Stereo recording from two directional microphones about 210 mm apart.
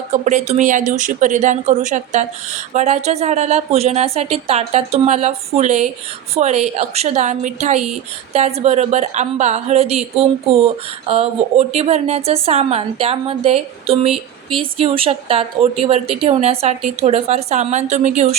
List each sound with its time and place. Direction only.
0.1 s a woman's voice: 35° right (ahead or behind)